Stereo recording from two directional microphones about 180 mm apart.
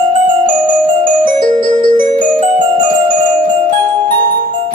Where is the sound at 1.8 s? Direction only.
50° right (ahead or behind).